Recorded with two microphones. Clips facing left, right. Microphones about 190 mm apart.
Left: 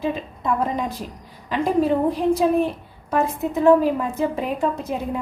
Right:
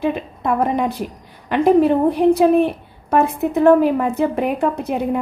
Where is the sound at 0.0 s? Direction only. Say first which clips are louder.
Right 4 dB; 65° right (ahead or behind).